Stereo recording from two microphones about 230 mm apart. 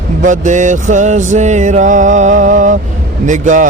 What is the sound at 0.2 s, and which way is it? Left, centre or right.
Mantra, right.